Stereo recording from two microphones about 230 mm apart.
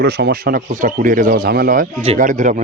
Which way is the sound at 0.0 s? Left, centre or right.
Right.